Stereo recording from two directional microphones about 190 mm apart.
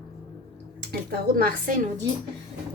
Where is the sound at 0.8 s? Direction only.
55° right (ahead or behind).